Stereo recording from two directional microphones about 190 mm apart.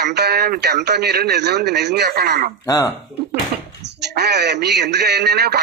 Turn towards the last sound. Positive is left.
turn(degrees=-60)  # may be behind; listen again after turning